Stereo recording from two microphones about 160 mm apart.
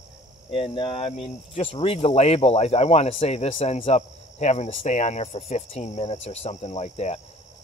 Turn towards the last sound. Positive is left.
turn(degrees=45)  # may be behind; listen again after turning